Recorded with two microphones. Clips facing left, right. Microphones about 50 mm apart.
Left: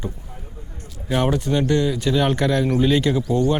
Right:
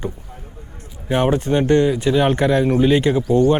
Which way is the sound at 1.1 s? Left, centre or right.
Right.